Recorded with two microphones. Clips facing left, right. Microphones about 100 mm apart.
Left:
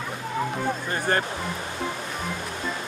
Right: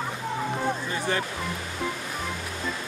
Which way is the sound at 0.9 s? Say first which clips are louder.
Left 3 dB; 50° left (ahead or behind).